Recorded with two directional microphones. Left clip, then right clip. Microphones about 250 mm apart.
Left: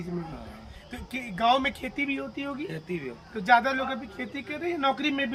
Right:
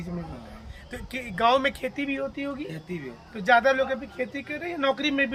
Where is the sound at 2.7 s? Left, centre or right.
Centre.